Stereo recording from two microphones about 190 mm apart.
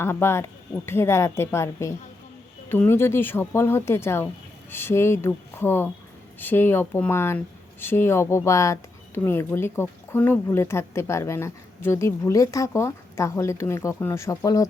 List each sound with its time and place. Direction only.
0.0 s speech: 15° left (ahead or behind)